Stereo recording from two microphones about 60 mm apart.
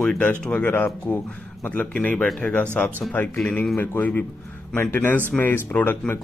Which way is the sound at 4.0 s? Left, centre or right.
Left.